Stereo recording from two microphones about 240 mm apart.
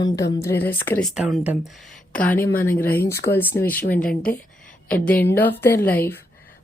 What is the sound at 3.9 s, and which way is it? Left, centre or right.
Speech, left.